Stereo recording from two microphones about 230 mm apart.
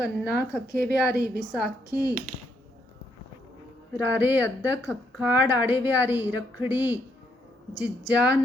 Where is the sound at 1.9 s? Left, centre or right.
Right.